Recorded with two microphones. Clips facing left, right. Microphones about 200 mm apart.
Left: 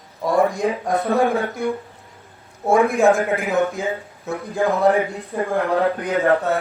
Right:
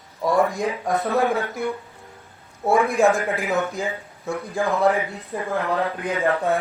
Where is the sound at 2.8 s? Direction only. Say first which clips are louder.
Left 3 dB; centre (ahead or behind).